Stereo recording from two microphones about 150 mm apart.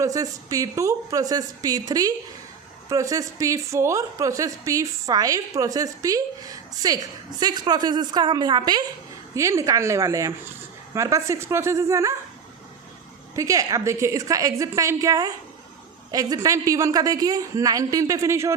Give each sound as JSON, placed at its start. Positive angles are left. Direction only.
{"t": 0.0, "sound": "a woman's voice", "side_deg": -20}
{"t": 13.3, "sound": "a woman's voice", "side_deg": -20}